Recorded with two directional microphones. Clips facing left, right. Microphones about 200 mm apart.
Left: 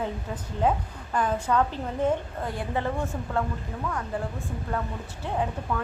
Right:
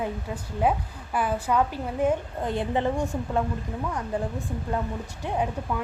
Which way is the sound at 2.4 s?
20° right (ahead or behind).